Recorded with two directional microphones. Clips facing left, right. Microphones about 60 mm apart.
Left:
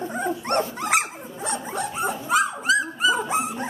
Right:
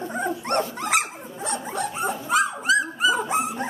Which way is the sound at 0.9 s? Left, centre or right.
Centre.